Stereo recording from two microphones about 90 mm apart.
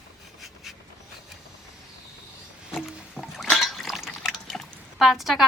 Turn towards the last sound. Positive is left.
turn(degrees=0)  # may be behind; listen again after turning